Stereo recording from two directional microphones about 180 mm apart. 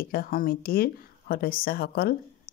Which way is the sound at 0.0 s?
55° left (ahead or behind).